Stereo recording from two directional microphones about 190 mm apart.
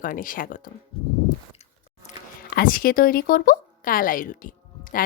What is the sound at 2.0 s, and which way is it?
Speech, 50° left (ahead or behind).